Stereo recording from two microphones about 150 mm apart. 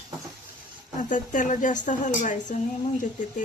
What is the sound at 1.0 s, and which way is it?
A woman's voice, 60° left (ahead or behind).